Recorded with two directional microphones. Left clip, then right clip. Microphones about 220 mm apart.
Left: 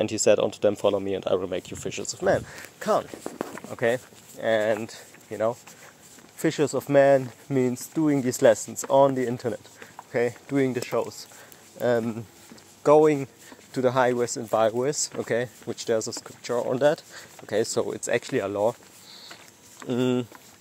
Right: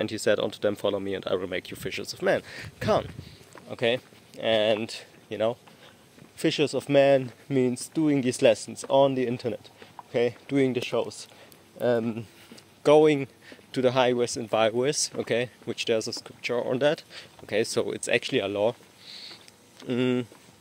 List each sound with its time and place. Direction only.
0.0 s speech: 10° left (ahead or behind)
2.8 s speech: 10° right (ahead or behind)
3.7 s speech: centre (ahead or behind)
4.6 s speech: 15° right (ahead or behind)
6.4 s speech: 5° left (ahead or behind)